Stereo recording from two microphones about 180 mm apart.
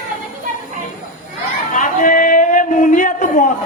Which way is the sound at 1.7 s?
45° left (ahead or behind).